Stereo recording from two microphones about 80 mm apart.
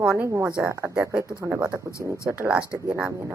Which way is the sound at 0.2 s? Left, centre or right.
Right.